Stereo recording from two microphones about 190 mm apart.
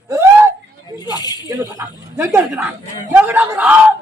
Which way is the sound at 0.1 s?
15° right (ahead or behind).